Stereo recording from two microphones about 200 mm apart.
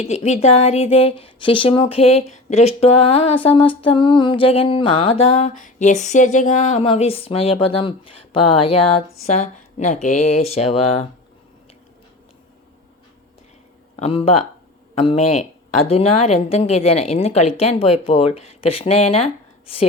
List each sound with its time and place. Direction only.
0.0 s a woman's voice: 30° left (ahead or behind)
13.9 s a woman's voice: 30° left (ahead or behind)